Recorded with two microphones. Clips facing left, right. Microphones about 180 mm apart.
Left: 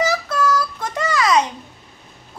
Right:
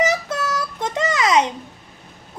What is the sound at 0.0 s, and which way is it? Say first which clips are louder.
Child singing: left 1 dB; 20° right (ahead or behind).